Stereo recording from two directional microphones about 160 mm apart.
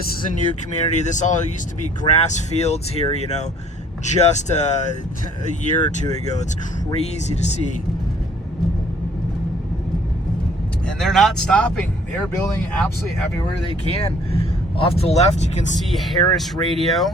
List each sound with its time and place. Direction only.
0.9 s speech: 50° left (ahead or behind)
10.8 s speech: centre (ahead or behind)
13.4 s speech: 35° left (ahead or behind)
15.9 s speech: centre (ahead or behind)